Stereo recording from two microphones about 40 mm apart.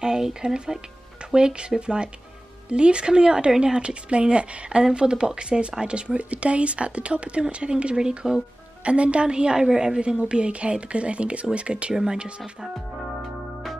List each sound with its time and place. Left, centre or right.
0.0 s a woman's voice: centre
11.9 s speech: centre